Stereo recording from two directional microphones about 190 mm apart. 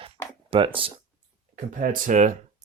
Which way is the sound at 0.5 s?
30° right (ahead or behind).